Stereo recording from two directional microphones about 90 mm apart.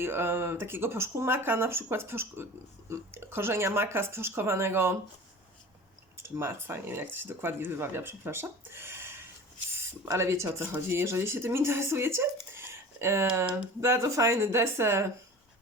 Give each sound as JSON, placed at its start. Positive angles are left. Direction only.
{"t": 0.0, "sound": "speech", "side_deg": -25}
{"t": 6.1, "sound": "speech", "side_deg": -25}